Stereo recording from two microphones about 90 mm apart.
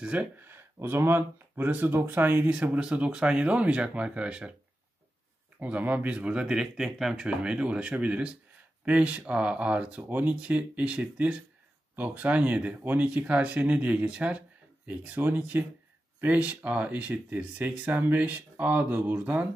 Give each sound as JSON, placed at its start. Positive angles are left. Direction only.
{"t": 0.0, "sound": "speech", "side_deg": -10}
{"t": 0.4, "sound": "speech", "side_deg": -25}
{"t": 5.6, "sound": "speech", "side_deg": -20}